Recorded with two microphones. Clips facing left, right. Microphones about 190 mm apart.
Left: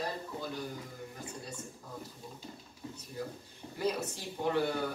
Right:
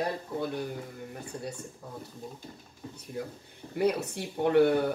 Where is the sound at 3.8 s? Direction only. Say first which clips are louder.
Right 6 dB; 60° right (ahead or behind).